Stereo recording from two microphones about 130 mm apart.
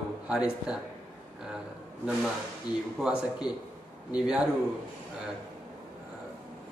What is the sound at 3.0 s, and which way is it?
Speech, 5° right (ahead or behind).